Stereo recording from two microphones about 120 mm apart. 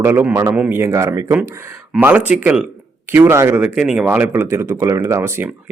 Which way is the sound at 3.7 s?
10° right (ahead or behind).